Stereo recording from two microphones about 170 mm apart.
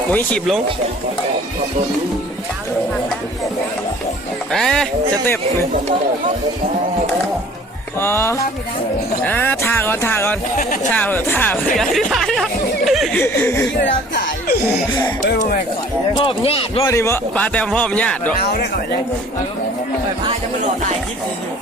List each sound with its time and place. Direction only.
0.1 s a man's voice: 10° left (ahead or behind)
4.5 s speech: 5° left (ahead or behind)
7.9 s a man's voice: 15° left (ahead or behind)
13.2 s a man's voice: 15° left (ahead or behind)
13.8 s music: 75° left (ahead or behind)
15.4 s speech: 55° left (ahead or behind)
16.1 s speech: 30° left (ahead or behind)
16.8 s a man's voice: 15° left (ahead or behind)